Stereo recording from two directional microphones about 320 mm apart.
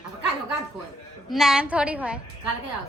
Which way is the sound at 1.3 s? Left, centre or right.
Centre.